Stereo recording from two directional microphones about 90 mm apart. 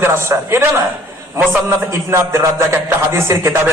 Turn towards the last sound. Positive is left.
turn(degrees=-25)  # may be behind; listen again after turning